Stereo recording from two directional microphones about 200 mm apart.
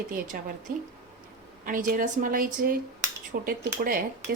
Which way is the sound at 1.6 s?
45° right (ahead or behind).